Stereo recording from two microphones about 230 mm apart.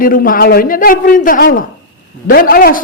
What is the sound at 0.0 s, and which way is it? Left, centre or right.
A man's voice, left.